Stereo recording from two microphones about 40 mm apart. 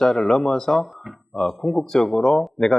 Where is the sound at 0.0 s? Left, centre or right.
Centre.